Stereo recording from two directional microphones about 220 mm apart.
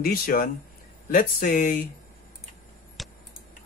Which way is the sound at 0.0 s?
40° left (ahead or behind).